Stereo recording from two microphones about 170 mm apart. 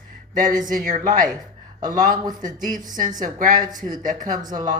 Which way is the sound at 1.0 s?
55° right (ahead or behind).